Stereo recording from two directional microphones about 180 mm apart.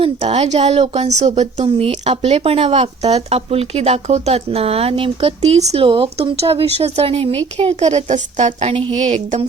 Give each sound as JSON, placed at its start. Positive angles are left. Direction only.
{"t": 0.0, "sound": "speech", "side_deg": -30}